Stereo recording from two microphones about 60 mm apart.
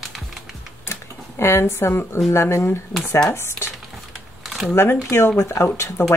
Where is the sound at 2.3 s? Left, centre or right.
Left.